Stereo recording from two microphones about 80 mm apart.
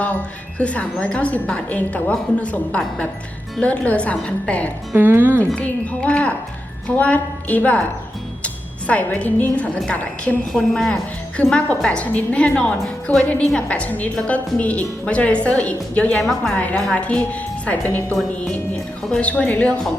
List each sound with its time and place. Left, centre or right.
0.6 s a woman's voice: centre
4.9 s speech: right
5.5 s a woman's voice: centre
8.9 s a woman's voice: centre
11.5 s a woman's voice: centre
16.6 s a woman's voice: centre